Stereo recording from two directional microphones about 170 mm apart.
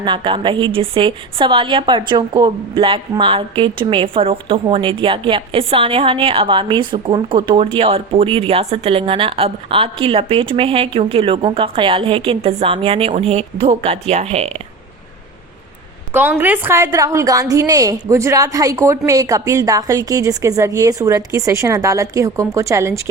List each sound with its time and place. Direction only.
0.0 s a woman's voice: 30° right (ahead or behind)
16.4 s a woman's voice: 10° right (ahead or behind)